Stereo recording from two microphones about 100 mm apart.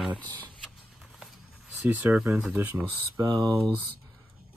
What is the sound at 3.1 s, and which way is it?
Speech, 40° right (ahead or behind).